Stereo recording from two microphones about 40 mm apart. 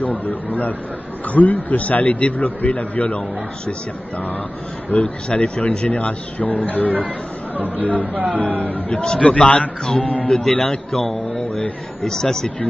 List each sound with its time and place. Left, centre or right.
0.0 s a man's voice: left
5.0 s a man's voice: left
8.0 s speech: right
8.6 s a man's voice: left
9.0 s a man's voice: left
10.5 s a man's voice: centre